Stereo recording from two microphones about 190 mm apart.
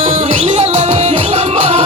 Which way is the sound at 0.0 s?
35° right (ahead or behind).